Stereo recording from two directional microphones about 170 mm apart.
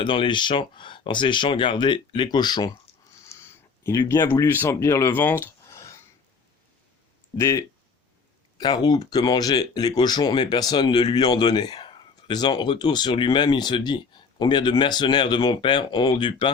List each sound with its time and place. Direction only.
0.0 s speech: 30° left (ahead or behind)
3.8 s speech: 20° left (ahead or behind)
7.3 s speech: 15° left (ahead or behind)